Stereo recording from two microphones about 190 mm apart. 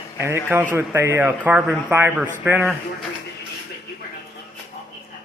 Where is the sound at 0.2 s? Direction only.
15° right (ahead or behind).